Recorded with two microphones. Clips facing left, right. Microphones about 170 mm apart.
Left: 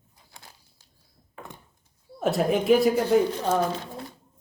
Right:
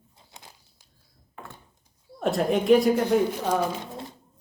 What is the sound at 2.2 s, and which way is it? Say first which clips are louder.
Speech: even; centre (ahead or behind).